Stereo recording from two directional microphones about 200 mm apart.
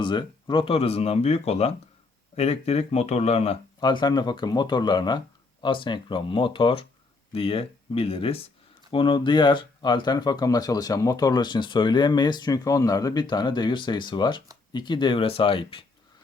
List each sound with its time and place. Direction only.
0.0 s speech: 25° left (ahead or behind)